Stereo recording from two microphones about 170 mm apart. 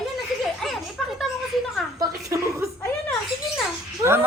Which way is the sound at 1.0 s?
Centre (ahead or behind).